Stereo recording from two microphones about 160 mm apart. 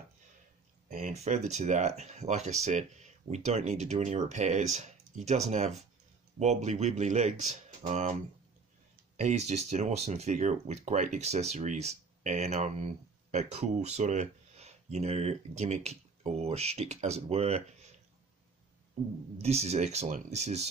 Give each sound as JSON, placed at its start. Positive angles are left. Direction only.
{"t": 0.8, "sound": "speech", "side_deg": -50}
{"t": 19.4, "sound": "speech", "side_deg": -40}